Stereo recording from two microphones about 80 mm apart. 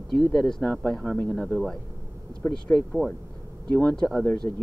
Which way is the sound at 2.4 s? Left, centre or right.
Left.